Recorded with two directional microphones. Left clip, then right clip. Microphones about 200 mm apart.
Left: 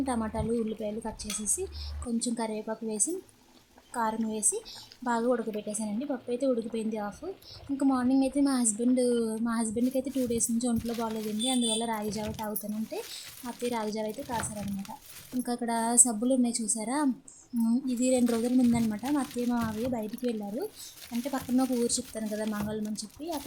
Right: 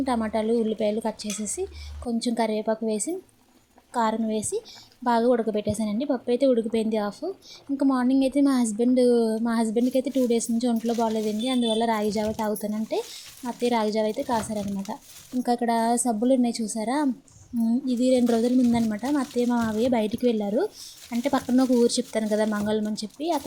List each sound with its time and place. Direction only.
0.0 s a woman's voice: 15° right (ahead or behind)
15.4 s a woman's voice: 15° right (ahead or behind)